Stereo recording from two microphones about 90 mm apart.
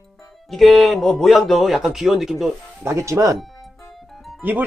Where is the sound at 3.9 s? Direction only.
Centre (ahead or behind).